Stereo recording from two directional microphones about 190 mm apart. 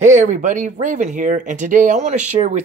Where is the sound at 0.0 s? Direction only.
40° right (ahead or behind).